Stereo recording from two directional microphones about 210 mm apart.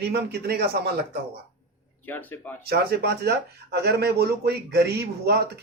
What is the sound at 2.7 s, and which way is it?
Speech, 50° right (ahead or behind).